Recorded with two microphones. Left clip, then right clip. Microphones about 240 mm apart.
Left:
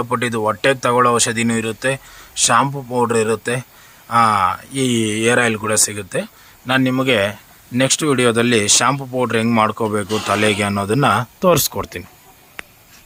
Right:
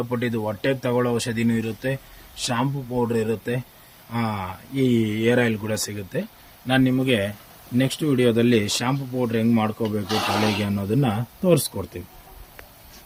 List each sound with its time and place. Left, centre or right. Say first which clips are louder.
0.1 s speech: left 8 dB; centre